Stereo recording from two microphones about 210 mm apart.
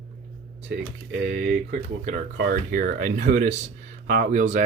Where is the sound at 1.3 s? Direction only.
40° right (ahead or behind).